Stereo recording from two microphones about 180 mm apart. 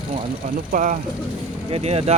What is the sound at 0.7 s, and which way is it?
Speech, 45° right (ahead or behind).